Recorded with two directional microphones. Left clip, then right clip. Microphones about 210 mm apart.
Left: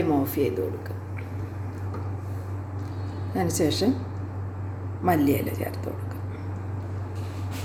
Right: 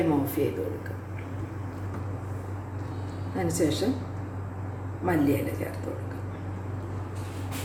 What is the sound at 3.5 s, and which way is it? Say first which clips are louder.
Speech: left 1 dB; 35° left (ahead or behind).